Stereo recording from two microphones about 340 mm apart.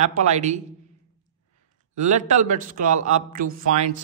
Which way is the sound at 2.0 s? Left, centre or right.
Right.